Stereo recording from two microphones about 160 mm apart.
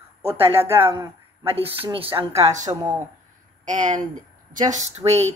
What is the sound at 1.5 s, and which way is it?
Speech, 35° right (ahead or behind).